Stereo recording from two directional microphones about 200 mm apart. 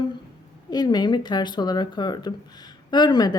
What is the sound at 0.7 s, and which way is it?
Speech, 20° left (ahead or behind).